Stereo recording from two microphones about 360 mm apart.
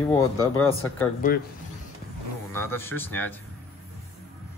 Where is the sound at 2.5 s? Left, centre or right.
Centre.